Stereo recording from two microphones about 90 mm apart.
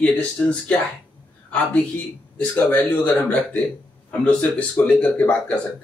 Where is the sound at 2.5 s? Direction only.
20° left (ahead or behind).